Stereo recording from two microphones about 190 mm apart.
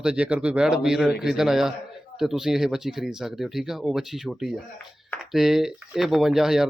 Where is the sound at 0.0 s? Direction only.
5° right (ahead or behind).